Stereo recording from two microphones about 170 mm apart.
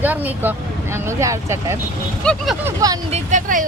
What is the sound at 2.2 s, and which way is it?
Speech, 5° left (ahead or behind).